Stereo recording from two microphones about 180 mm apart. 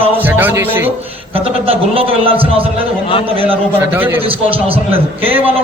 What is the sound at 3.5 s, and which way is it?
Speech, 10° right (ahead or behind).